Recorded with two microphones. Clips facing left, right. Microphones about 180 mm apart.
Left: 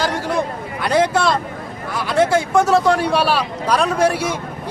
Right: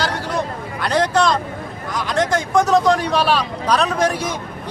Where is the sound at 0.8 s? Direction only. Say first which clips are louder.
Left 1 dB; 10° left (ahead or behind).